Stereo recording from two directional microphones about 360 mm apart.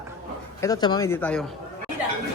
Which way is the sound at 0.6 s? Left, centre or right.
Centre.